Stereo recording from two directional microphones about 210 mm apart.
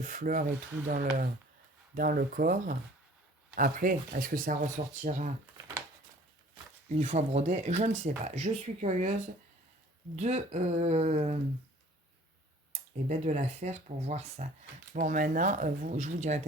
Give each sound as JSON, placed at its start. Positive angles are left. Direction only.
{"t": 0.0, "sound": "speech", "side_deg": -40}
{"t": 7.0, "sound": "speech", "side_deg": -35}
{"t": 10.2, "sound": "speech", "side_deg": -35}
{"t": 13.1, "sound": "speech", "side_deg": -35}